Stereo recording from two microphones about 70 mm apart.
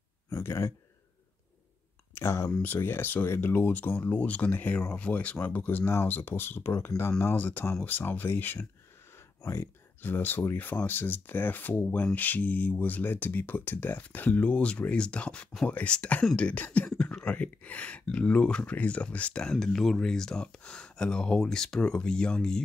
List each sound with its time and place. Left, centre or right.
0.3 s speech: left
2.1 s speech: left; by 22.6 s centre